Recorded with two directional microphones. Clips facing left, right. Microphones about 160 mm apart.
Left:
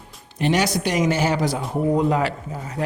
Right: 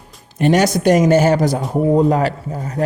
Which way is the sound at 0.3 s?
45° right (ahead or behind).